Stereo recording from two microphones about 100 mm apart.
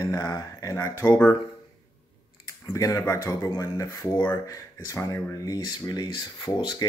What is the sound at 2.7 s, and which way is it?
Speech, 30° left (ahead or behind).